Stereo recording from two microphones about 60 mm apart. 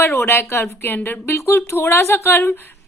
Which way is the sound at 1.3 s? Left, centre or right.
Left.